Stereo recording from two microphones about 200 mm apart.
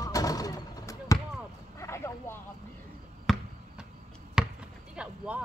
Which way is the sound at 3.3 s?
Centre (ahead or behind).